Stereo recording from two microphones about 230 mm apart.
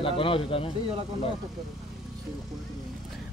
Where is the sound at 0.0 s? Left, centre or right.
Left.